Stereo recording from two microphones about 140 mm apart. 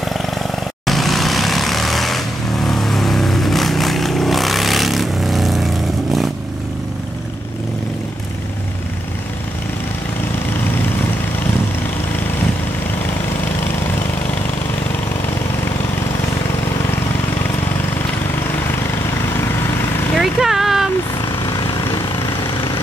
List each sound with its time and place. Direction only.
0.8 s vehicle: centre (ahead or behind)
20.2 s vehicle: centre (ahead or behind)
21.4 s vehicle: 30° left (ahead or behind)